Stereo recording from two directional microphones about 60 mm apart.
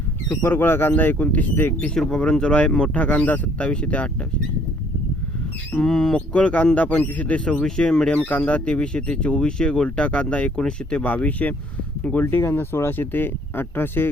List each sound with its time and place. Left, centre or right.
0.3 s speech: left
1.8 s speech: centre
5.8 s speech: centre
6.1 s speech: left
8.1 s speech: left
12.2 s speech: left